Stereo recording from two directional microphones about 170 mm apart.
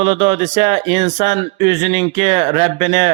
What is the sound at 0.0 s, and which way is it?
Speech, 35° right (ahead or behind).